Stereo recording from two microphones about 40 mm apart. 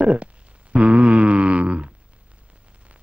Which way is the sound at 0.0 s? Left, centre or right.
Right.